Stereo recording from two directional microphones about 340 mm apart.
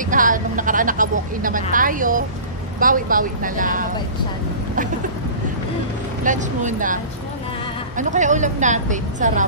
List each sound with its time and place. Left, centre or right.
0.0 s speech: right
6.2 s speech: right
8.0 s speech: right